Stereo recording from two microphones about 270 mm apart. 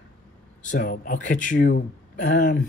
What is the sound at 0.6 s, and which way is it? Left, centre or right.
A man's voice, left.